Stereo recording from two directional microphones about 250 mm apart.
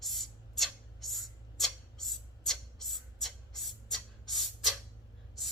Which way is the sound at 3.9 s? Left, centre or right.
Centre.